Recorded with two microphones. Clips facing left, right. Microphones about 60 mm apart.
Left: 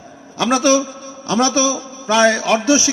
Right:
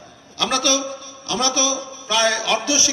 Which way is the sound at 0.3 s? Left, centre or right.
Left.